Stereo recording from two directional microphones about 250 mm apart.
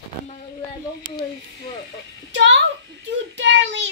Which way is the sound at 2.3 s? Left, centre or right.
Right.